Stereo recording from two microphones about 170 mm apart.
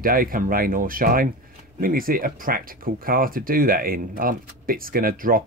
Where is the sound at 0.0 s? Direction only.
55° right (ahead or behind).